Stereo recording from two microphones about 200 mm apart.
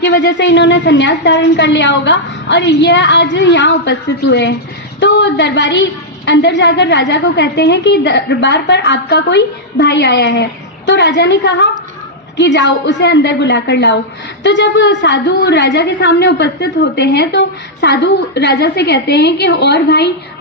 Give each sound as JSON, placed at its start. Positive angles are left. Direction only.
{"t": 0.0, "sound": "a woman's voice", "side_deg": 60}